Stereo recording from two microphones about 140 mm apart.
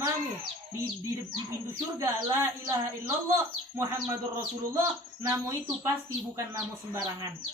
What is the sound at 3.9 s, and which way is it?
Speech, 20° right (ahead or behind).